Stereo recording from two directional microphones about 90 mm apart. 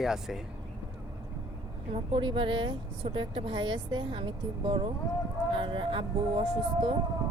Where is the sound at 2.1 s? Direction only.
75° right (ahead or behind).